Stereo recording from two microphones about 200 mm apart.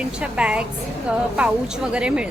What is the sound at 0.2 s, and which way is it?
Speech, 5° right (ahead or behind).